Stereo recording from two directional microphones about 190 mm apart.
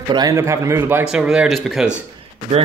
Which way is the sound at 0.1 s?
20° right (ahead or behind).